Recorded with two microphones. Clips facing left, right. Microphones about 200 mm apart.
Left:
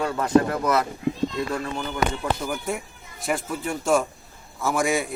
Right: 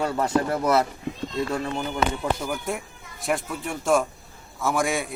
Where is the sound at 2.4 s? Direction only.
Centre (ahead or behind).